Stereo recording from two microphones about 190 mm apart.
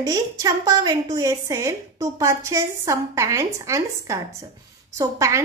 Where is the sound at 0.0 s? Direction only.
20° right (ahead or behind).